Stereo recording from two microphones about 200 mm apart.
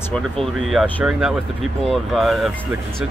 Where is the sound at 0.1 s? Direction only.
Centre (ahead or behind).